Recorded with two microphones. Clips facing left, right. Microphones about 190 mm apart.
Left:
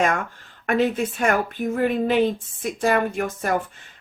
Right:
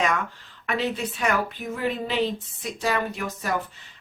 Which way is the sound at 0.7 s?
50° left (ahead or behind).